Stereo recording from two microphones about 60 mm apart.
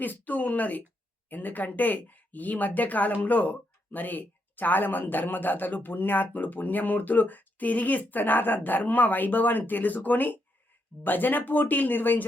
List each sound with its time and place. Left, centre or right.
0.0 s speech: left